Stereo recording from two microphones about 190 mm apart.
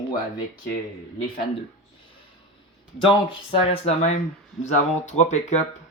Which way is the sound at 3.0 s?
30° left (ahead or behind).